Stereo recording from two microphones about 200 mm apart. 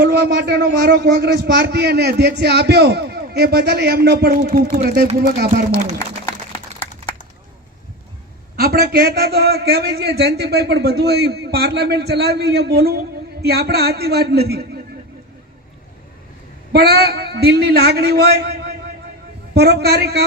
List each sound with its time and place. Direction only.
0.0 s a man's voice: 55° right (ahead or behind)
5.5 s speech: 35° right (ahead or behind)
8.5 s a man's voice: 50° right (ahead or behind)
16.7 s a man's voice: 50° right (ahead or behind)